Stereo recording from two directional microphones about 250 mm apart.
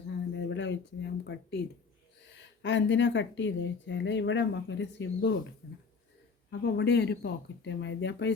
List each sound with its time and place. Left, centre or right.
0.1 s a sound: left
2.2 s speech: left
6.5 s speech: left